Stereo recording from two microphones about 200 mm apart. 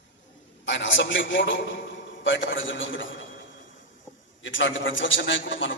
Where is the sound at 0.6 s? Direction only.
65° left (ahead or behind).